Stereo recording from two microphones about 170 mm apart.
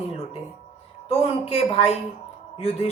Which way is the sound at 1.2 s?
35° left (ahead or behind).